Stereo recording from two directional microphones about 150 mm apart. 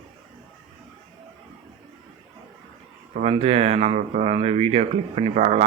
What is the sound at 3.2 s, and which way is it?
Speech, 45° right (ahead or behind).